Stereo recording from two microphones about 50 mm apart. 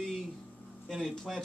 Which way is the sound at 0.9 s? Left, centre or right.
Centre.